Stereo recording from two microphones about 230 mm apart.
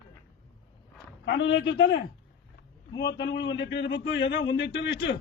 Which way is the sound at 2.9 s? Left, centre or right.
Centre.